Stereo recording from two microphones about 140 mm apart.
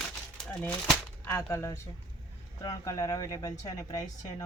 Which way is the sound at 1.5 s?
20° left (ahead or behind).